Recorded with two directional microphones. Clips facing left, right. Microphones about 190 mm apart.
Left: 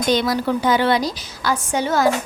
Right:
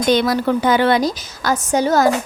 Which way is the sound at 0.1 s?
55° right (ahead or behind).